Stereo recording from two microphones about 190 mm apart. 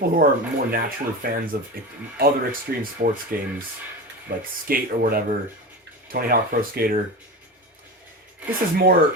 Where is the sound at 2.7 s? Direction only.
50° right (ahead or behind).